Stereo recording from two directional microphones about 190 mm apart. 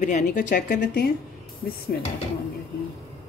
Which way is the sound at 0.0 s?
40° left (ahead or behind).